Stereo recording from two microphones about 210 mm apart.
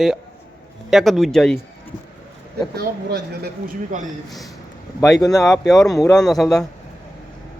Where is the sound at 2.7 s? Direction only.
50° right (ahead or behind).